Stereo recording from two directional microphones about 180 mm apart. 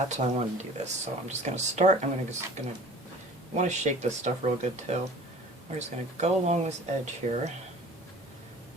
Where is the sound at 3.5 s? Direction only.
40° right (ahead or behind).